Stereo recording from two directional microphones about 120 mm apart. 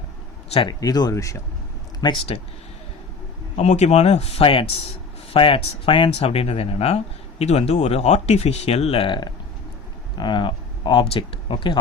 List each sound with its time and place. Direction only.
0.7 s speech: 30° left (ahead or behind)
2.0 s speech: 35° left (ahead or behind)
3.5 s speech: 70° left (ahead or behind); by 11.8 s 45° left (ahead or behind)